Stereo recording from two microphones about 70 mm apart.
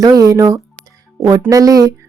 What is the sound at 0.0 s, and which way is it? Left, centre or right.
Speech, right.